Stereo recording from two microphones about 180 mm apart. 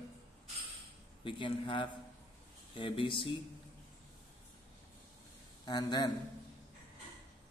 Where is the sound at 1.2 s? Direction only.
25° left (ahead or behind).